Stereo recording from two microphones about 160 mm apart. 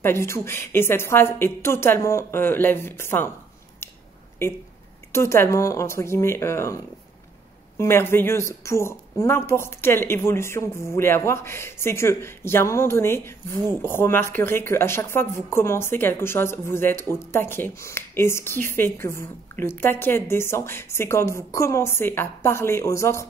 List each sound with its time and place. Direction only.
0.0 s a woman's voice: 15° left (ahead or behind)
5.1 s a woman's voice: 15° left (ahead or behind)